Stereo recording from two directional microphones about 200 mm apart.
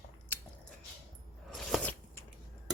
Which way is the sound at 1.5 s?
Centre (ahead or behind).